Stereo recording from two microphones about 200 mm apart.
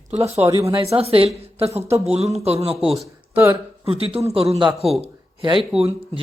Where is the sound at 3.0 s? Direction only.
10° right (ahead or behind).